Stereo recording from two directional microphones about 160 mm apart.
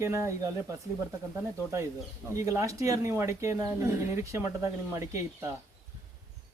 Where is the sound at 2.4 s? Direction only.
20° right (ahead or behind).